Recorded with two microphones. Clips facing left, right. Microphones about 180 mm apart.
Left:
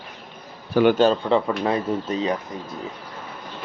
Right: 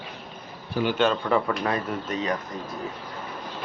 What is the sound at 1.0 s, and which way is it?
A man's voice, 30° left (ahead or behind).